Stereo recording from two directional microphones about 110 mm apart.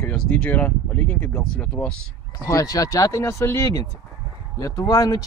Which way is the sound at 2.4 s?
30° left (ahead or behind).